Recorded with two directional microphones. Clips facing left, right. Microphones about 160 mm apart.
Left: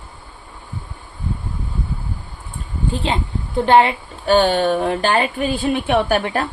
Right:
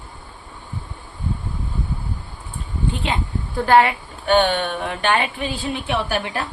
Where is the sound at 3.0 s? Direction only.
30° left (ahead or behind).